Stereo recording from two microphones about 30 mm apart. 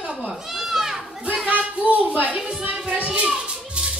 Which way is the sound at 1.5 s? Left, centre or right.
Right.